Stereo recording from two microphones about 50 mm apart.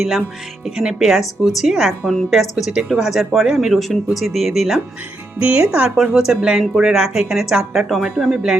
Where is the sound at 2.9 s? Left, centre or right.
Centre.